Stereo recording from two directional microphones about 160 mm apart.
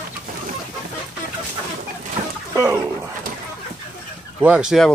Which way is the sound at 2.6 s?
20° right (ahead or behind).